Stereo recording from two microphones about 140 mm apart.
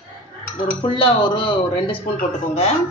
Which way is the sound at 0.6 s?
35° left (ahead or behind).